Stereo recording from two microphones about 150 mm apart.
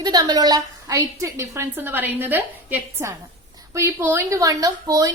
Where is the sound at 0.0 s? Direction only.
25° right (ahead or behind).